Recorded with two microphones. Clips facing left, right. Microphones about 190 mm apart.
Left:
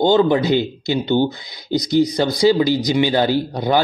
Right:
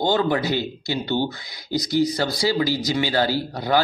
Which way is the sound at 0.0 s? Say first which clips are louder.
Left 6 dB; 25° left (ahead or behind).